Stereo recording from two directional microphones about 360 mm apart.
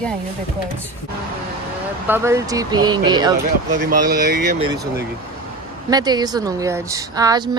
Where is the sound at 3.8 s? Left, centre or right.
Right.